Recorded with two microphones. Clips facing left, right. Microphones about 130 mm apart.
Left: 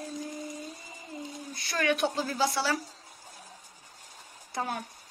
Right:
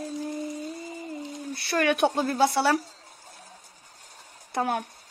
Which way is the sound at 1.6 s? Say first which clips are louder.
Right 5 dB; 60° right (ahead or behind).